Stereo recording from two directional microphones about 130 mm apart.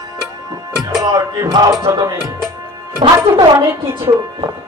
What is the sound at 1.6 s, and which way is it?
Music, 35° right (ahead or behind).